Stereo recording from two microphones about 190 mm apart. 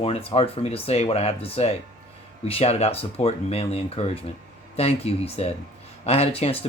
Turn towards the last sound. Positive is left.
turn(degrees=30)  # may be behind; listen again after turning